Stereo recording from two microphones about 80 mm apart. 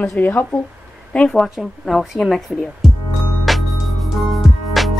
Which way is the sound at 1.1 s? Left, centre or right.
Centre.